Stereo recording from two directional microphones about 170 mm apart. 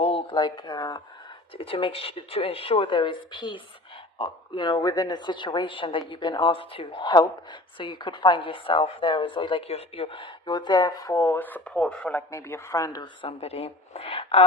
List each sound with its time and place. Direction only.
0.0 s speech: 35° left (ahead or behind)
13.2 s speech: 35° left (ahead or behind)